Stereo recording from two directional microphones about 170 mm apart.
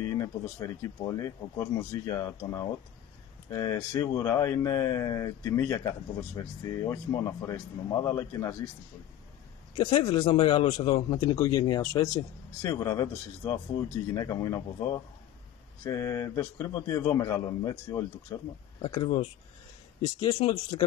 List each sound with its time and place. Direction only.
0.0 s speech: 20° left (ahead or behind)
9.8 s speech: 25° left (ahead or behind)